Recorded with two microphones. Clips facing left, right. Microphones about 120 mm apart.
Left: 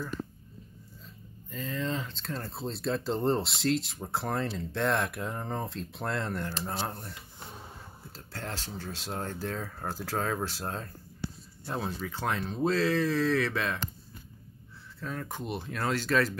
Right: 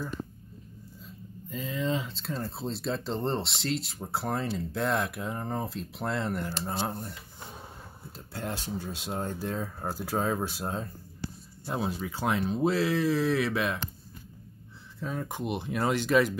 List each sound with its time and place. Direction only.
1.5 s speech: 5° right (ahead or behind)
8.3 s speech: 10° right (ahead or behind)
15.0 s speech: 15° right (ahead or behind)